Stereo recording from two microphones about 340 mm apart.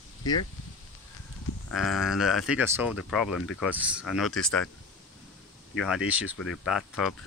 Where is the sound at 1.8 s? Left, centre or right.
Centre.